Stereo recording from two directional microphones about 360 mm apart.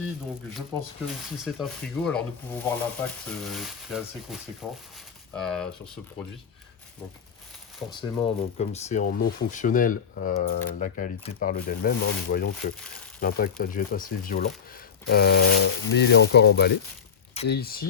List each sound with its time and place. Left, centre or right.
1.4 s speech: centre
7.9 s speech: centre